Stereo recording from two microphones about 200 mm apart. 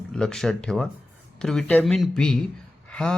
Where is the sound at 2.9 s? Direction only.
5° left (ahead or behind).